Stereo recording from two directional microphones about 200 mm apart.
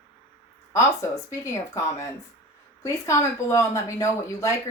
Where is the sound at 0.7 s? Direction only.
15° left (ahead or behind).